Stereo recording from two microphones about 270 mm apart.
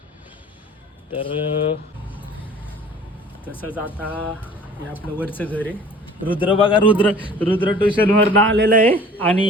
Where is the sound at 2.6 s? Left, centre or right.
Centre.